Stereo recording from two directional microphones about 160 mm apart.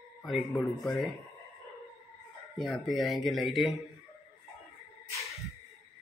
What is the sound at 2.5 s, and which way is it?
Speech, centre (ahead or behind).